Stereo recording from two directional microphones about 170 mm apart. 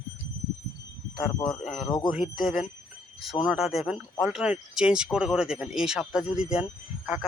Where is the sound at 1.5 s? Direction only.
Centre (ahead or behind).